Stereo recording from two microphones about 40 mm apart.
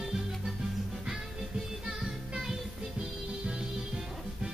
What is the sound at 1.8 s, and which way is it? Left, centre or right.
Music, centre.